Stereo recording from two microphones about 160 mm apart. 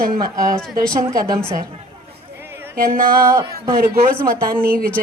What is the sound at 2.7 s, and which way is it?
Speech, 65° right (ahead or behind).